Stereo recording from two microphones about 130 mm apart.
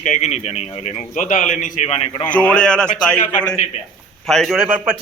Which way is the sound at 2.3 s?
10° left (ahead or behind).